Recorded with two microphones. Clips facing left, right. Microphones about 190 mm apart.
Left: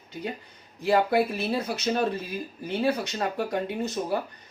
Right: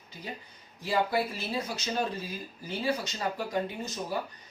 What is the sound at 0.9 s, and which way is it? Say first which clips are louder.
Speech: left 6 dB; 60° left (ahead or behind).